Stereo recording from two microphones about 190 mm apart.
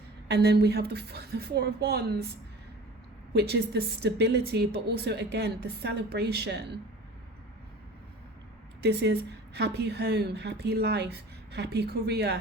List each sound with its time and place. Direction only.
0.3 s a woman's voice: 60° right (ahead or behind)
3.3 s a woman's voice: 60° right (ahead or behind)
8.8 s a woman's voice: 60° right (ahead or behind)